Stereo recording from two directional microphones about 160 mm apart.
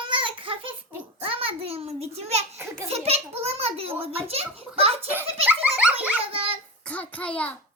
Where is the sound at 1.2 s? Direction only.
35° right (ahead or behind).